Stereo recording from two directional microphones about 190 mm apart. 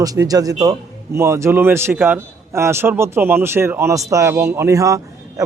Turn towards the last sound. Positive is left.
turn(degrees=-15)  # may be behind; listen again after turning